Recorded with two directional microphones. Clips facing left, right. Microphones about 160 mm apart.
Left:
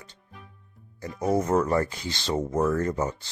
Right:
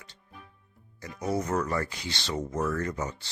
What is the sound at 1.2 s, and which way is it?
Speech, 45° left (ahead or behind).